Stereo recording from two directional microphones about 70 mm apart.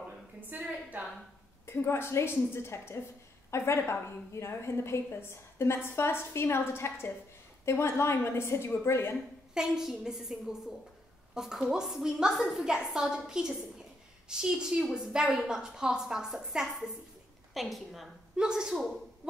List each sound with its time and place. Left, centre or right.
0.5 s a woman's voice: right
1.7 s a woman's voice: left
9.5 s a woman's voice: centre